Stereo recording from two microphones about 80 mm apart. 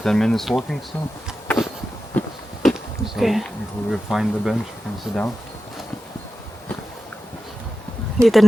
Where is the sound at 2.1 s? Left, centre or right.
Left.